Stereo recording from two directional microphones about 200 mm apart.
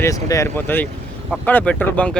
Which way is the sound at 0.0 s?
15° left (ahead or behind).